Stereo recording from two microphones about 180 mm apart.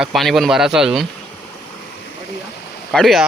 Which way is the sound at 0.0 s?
Centre (ahead or behind).